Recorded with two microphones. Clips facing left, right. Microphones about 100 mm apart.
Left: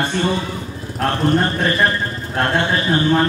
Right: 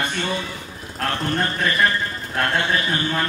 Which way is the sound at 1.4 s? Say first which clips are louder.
Left 3 dB; 30° left (ahead or behind).